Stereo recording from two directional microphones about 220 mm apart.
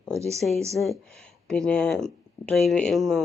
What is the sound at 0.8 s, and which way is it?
Speech, centre (ahead or behind).